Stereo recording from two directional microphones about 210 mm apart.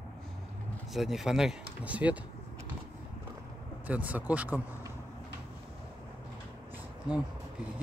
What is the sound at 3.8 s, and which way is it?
Speech, 5° right (ahead or behind).